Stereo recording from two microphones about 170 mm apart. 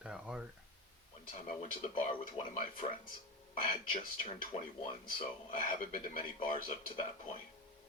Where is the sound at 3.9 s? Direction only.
40° left (ahead or behind).